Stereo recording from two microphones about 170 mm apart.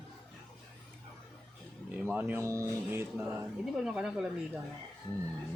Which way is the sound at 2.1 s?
10° right (ahead or behind).